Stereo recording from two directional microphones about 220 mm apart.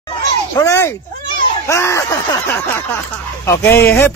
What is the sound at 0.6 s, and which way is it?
Music, 15° left (ahead or behind).